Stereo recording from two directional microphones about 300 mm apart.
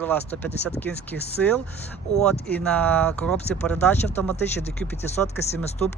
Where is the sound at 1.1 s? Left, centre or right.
Left.